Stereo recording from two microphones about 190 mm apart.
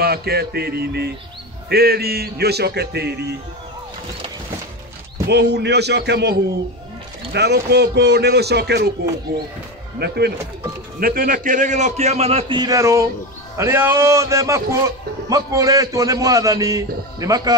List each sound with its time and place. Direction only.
0.0 s a man's voice: 55° right (ahead or behind)
5.3 s a man's voice: 60° right (ahead or behind)
7.3 s a man's voice: 60° right (ahead or behind)
9.9 s a man's voice: 55° right (ahead or behind); by 17.6 s 20° right (ahead or behind)